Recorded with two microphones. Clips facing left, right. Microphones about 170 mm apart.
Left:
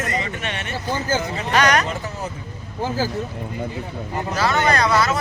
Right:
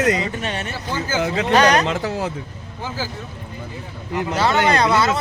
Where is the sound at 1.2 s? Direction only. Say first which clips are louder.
Right 5 dB; 85° right.